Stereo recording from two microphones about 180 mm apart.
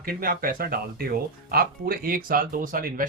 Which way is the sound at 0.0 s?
55° right (ahead or behind).